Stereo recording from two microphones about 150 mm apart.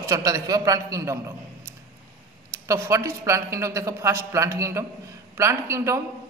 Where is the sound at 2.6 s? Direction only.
20° right (ahead or behind).